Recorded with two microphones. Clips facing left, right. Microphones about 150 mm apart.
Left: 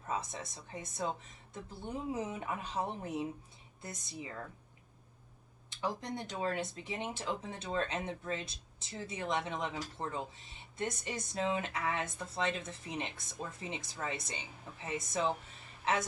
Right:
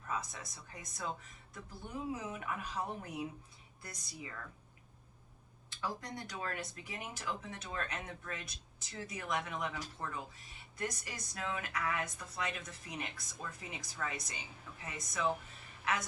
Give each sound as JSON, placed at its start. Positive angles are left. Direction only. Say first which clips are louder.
{"t": 0.1, "sound": "speech", "louder": "left 3 dB", "side_deg": 25}
{"t": 2.1, "sound": "speech", "louder": "left 3 dB", "side_deg": 25}
{"t": 5.7, "sound": "a woman's voice", "louder": "left 4 dB", "side_deg": 20}